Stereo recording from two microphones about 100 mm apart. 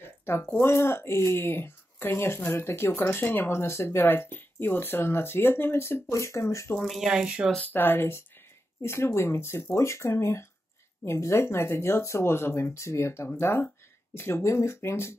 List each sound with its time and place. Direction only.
0.2 s a sound: 25° left (ahead or behind)
0.6 s speech: 25° left (ahead or behind)
6.8 s speech: centre (ahead or behind)
7.5 s speech: 20° left (ahead or behind)